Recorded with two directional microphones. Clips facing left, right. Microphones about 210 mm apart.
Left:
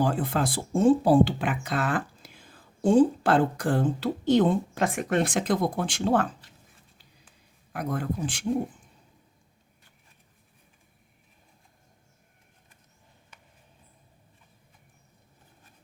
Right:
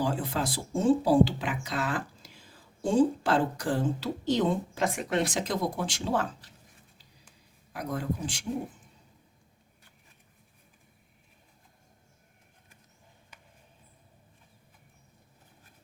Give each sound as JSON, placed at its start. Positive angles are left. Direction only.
{"t": 0.0, "sound": "speech", "side_deg": 55}
{"t": 7.7, "sound": "speech", "side_deg": 55}